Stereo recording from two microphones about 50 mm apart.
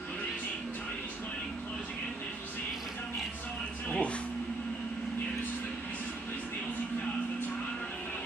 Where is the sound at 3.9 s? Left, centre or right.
Left.